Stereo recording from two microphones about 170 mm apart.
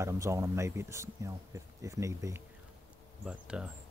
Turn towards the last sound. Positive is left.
turn(degrees=-5)  # may be behind; listen again after turning